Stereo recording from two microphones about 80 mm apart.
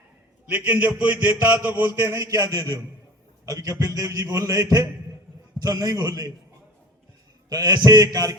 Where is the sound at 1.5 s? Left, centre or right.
Right.